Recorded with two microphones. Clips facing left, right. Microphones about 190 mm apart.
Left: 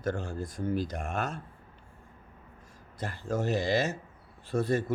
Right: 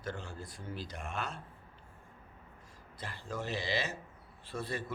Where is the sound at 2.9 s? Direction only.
45° left (ahead or behind).